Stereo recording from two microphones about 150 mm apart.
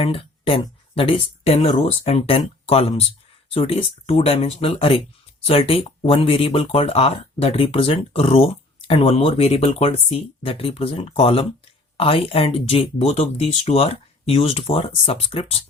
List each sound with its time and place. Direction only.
0.0 s speech: 35° left (ahead or behind)